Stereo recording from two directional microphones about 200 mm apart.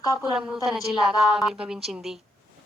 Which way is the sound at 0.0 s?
20° left (ahead or behind).